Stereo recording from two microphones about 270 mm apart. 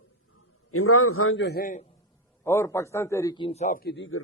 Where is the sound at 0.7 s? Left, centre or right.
Left.